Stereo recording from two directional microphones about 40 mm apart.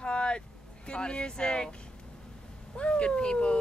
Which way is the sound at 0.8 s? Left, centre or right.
Left.